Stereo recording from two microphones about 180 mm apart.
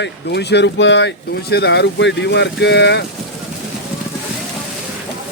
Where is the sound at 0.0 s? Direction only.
70° left (ahead or behind).